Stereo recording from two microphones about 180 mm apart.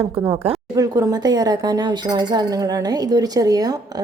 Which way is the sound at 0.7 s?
20° right (ahead or behind).